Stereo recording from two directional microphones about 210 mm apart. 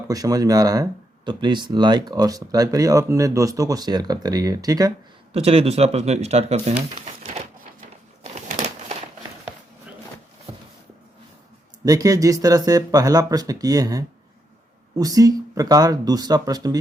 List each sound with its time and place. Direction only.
0.1 s speech: 15° right (ahead or behind)
5.3 s speech: 30° right (ahead or behind)
8.2 s crumpling: 35° right (ahead or behind)
11.9 s speech: 15° right (ahead or behind)